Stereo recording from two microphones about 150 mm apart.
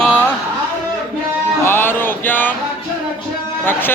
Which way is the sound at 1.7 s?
15° left (ahead or behind).